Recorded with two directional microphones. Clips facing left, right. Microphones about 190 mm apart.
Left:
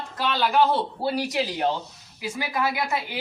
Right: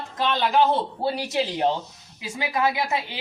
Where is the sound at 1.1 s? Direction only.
25° right (ahead or behind).